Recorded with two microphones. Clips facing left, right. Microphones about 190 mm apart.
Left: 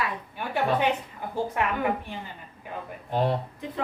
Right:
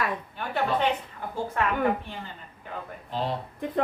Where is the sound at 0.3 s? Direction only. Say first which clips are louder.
Left 2 dB; 10° left (ahead or behind).